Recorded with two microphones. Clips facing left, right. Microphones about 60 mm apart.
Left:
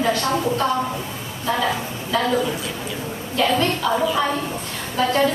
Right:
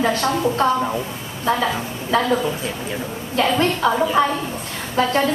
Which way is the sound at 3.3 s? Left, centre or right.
Right.